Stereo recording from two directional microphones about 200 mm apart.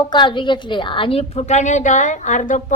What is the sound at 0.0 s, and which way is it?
A woman's voice, 25° left (ahead or behind).